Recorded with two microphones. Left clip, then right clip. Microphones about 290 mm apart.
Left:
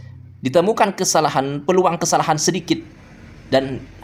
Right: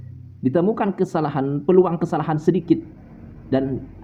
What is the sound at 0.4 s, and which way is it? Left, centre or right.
Speech, left.